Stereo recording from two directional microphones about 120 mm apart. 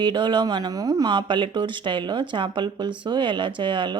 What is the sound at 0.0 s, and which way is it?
Speech, 40° right (ahead or behind).